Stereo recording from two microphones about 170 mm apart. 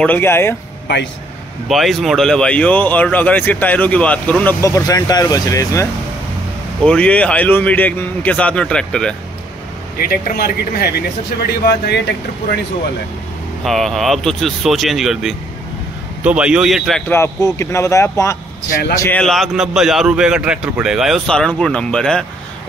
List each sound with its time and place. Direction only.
0.0 s speech: 10° left (ahead or behind)
1.7 s speech: centre (ahead or behind); by 5.9 s 20° left (ahead or behind)
6.8 s speech: 5° left (ahead or behind)
9.9 s speech: 60° left (ahead or behind)
13.7 s a man's voice: centre (ahead or behind)
17.1 s a man's voice: 15° left (ahead or behind)